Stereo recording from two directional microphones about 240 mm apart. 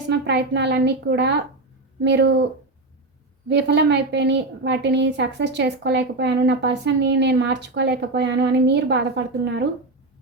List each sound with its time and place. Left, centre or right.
0.1 s a woman's voice: right
3.5 s a woman's voice: right